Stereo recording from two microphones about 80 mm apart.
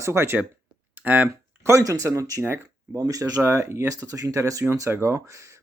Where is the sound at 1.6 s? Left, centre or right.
Right.